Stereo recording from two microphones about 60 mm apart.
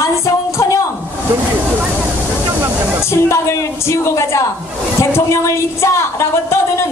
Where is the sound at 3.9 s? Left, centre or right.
Left.